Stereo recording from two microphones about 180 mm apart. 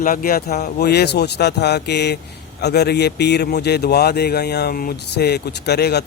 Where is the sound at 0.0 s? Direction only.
50° left (ahead or behind).